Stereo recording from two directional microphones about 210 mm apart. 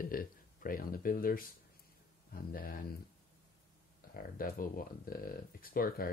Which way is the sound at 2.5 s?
45° left (ahead or behind).